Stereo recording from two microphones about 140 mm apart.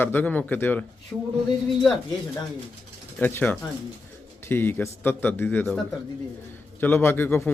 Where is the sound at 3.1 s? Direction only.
10° left (ahead or behind).